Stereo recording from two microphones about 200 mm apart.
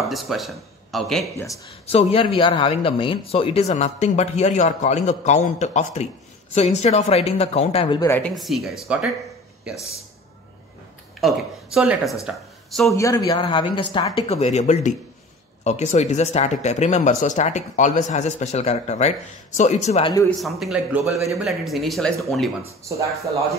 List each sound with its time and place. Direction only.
0.1 s speech: centre (ahead or behind)
1.9 s speech: 30° left (ahead or behind)
8.1 s speech: 5° left (ahead or behind)
11.1 s speech: centre (ahead or behind)
12.9 s speech: 15° left (ahead or behind)
20.3 s speech: centre (ahead or behind)